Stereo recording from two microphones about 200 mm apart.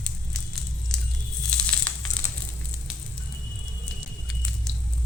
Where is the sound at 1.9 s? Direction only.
5° left (ahead or behind).